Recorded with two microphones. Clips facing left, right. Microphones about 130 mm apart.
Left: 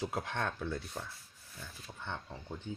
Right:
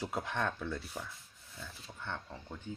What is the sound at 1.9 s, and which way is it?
Speech, 5° left (ahead or behind).